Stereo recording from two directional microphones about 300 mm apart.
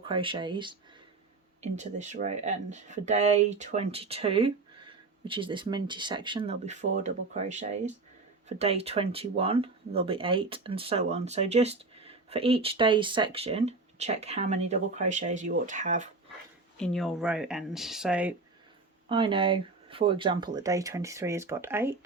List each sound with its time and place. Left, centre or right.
0.0 s speech: centre
16.7 s speech: centre
19.0 s speech: centre